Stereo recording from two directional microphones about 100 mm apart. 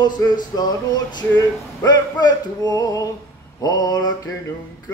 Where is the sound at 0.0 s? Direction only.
40° left (ahead or behind).